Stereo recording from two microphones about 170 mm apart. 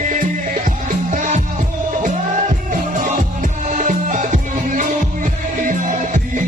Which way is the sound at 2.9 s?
50° right (ahead or behind).